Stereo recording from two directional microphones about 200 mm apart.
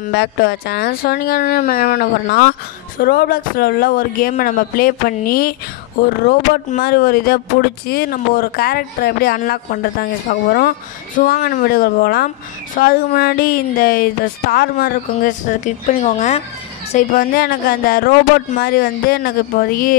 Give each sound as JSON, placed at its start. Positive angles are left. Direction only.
{"t": 0.1, "sound": "speech", "side_deg": 50}
{"t": 16.9, "sound": "speech", "side_deg": 45}